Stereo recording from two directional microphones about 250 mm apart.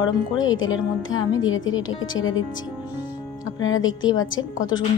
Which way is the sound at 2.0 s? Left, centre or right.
Left.